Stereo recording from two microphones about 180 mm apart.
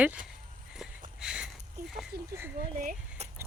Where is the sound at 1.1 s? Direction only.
5° right (ahead or behind).